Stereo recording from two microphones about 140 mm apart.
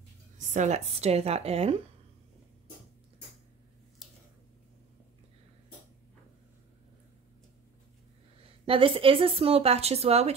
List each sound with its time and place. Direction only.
0.5 s speech: 55° right (ahead or behind)
4.0 s squish: 5° right (ahead or behind)
8.6 s speech: 40° right (ahead or behind)